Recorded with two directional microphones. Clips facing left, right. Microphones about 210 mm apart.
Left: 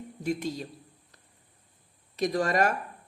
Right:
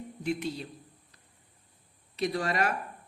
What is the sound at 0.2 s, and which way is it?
Speech, 40° left (ahead or behind).